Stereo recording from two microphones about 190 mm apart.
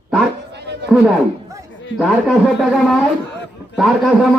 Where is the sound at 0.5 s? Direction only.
60° right (ahead or behind).